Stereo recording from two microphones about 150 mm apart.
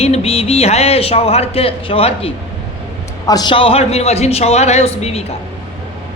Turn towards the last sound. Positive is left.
turn(degrees=45)  # may be behind; listen again after turning